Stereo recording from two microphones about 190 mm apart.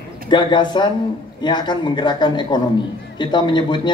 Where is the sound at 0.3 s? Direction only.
25° left (ahead or behind).